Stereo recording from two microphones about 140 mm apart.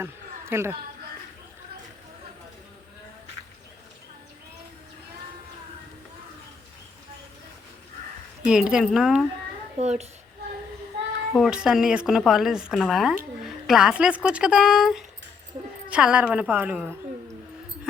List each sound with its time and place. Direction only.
0.0 s a sound: 20° right (ahead or behind)
8.4 s speech: 5° right (ahead or behind)
9.7 s a child's voice: 50° right (ahead or behind)
11.3 s a woman's voice: 5° right (ahead or behind)